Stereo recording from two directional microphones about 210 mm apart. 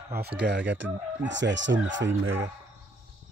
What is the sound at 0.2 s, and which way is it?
Speech, 55° right (ahead or behind).